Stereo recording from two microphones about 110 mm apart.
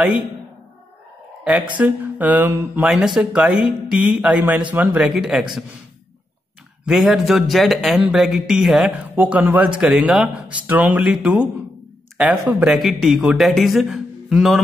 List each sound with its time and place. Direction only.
1.8 s speech: 15° right (ahead or behind)
2.9 s speech: 5° right (ahead or behind)
6.9 s a man's voice: centre (ahead or behind)
9.1 s a man's voice: 15° right (ahead or behind)
10.7 s a man's voice: 15° right (ahead or behind)